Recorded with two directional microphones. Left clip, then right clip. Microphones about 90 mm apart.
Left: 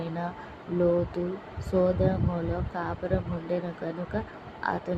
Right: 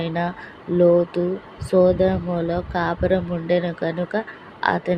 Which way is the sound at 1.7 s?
40° right (ahead or behind).